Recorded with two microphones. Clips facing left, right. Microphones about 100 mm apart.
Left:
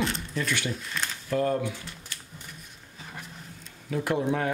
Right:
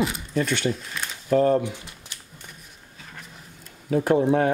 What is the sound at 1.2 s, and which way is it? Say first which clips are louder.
Speech: right 7 dB; 40° right (ahead or behind).